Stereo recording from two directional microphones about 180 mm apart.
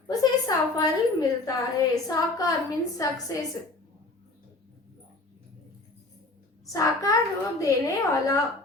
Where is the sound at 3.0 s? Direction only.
20° left (ahead or behind).